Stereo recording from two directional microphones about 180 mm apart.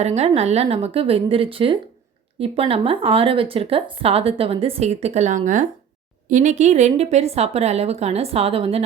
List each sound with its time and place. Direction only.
0.0 s speech: 35° right (ahead or behind)